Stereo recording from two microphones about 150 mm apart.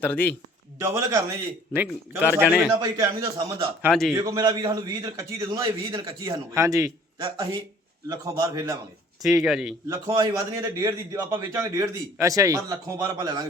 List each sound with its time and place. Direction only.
0.0 s speech: 10° left (ahead or behind)
0.8 s a man's voice: 20° right (ahead or behind); by 2.7 s 5° right (ahead or behind)
2.7 s a man's voice: 25° right (ahead or behind)
9.4 s a man's voice: centre (ahead or behind)
9.9 s a man's voice: 20° right (ahead or behind)